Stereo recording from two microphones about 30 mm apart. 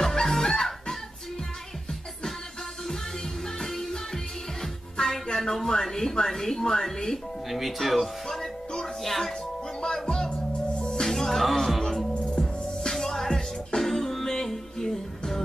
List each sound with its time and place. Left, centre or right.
0.0 s fowl: centre
3.6 s music: centre
6.2 s speech: centre
7.4 s music: centre
10.8 s music: left
11.1 s music: centre
12.4 s music: centre